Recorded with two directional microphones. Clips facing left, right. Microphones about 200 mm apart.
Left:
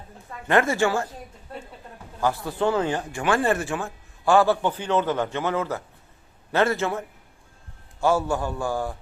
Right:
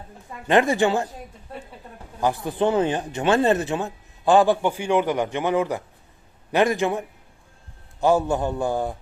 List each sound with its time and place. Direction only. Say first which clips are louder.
0.4 s speech: right 2 dB; 15° right (ahead or behind)
2.2 s speech: right 2 dB; 20° right (ahead or behind)
8.0 s a man's voice: right 3 dB; 20° right (ahead or behind)